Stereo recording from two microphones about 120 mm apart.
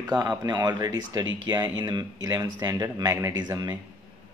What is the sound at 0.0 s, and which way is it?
A man's voice, 30° right (ahead or behind).